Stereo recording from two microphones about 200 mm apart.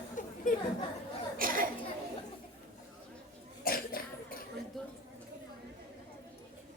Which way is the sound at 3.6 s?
45° left (ahead or behind).